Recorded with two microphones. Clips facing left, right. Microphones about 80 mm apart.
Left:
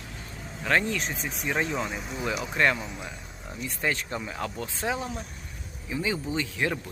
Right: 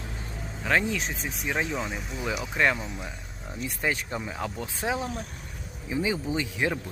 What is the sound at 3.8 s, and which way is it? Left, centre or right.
Speech, centre.